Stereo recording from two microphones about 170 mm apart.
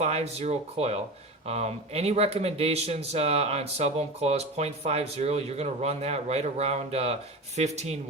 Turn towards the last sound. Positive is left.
turn(degrees=-40)  # may be behind; listen again after turning